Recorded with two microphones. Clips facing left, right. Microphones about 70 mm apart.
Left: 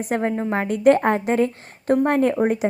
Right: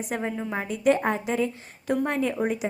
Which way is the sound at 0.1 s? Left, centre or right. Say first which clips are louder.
Left 8 dB; left.